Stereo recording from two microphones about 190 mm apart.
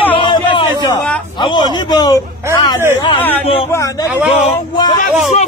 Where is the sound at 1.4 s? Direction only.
20° left (ahead or behind).